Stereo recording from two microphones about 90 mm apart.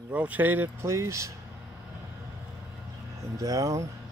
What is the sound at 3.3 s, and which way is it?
Speech, 40° right (ahead or behind).